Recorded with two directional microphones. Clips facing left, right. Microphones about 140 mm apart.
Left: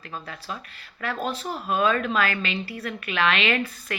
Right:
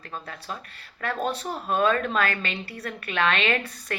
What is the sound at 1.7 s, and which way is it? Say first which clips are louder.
Speech: even; 40° right (ahead or behind).